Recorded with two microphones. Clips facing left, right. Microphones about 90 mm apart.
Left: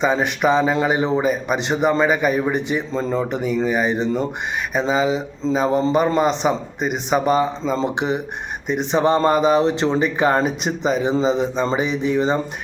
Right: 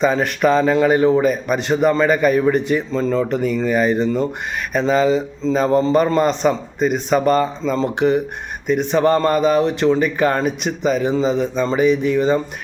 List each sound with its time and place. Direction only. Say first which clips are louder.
0.0 s a man's voice: right 2 dB; 15° left (ahead or behind)